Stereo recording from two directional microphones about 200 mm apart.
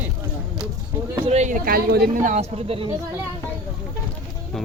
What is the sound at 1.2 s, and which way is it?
Speech, 35° right (ahead or behind).